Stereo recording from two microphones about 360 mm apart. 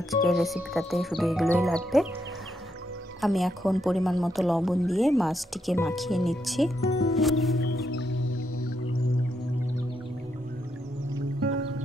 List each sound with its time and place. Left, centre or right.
0.1 s speech: centre
3.2 s speech: centre
7.7 s music: left
11.1 s music: right